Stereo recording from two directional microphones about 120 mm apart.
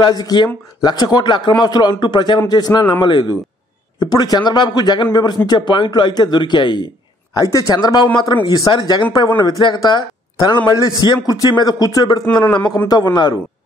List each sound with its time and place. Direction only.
0.0 s speech: 35° left (ahead or behind)
7.3 s speech: 30° left (ahead or behind)